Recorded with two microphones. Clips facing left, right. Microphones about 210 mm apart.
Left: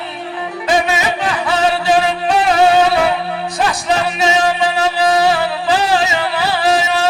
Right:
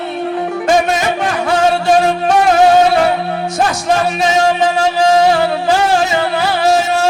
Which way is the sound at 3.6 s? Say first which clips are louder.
Right 2 dB; 45° right (ahead or behind).